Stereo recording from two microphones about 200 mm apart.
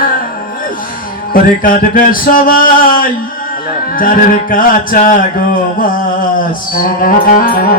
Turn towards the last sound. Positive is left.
turn(degrees=45)  # may be behind; listen again after turning